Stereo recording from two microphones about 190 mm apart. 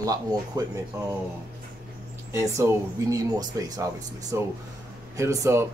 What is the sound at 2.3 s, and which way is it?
Speech, 15° right (ahead or behind).